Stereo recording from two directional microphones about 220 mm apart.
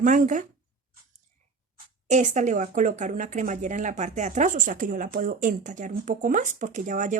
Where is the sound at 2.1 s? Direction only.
35° right (ahead or behind).